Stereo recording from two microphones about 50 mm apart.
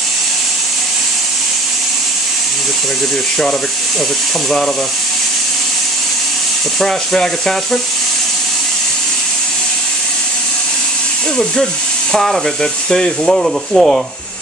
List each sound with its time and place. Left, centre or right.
6.8 s speech: centre
12.1 s speech: centre